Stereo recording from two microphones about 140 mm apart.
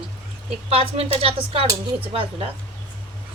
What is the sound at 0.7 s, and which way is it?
A woman's voice, 45° right (ahead or behind).